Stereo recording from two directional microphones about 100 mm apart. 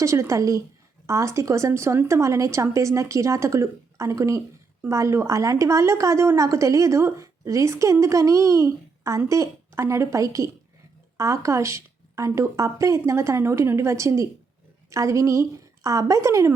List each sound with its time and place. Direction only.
0.0 s a woman's voice: 30° right (ahead or behind)